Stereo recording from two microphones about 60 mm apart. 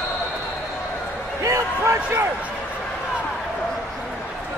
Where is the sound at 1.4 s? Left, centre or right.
Right.